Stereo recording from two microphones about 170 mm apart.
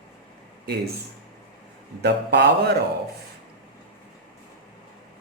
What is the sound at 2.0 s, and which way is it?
Speech, 75° right (ahead or behind).